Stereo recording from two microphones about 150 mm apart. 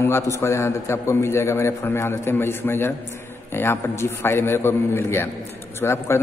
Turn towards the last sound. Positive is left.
turn(degrees=15)  # may be behind; listen again after turning